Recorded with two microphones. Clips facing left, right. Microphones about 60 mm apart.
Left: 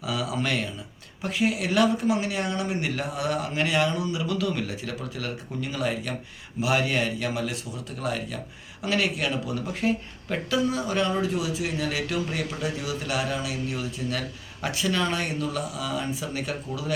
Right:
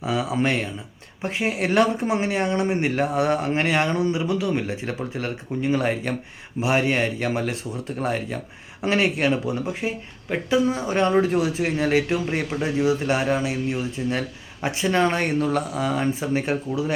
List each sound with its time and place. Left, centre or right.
0.0 s speech: right
9.8 s speech: right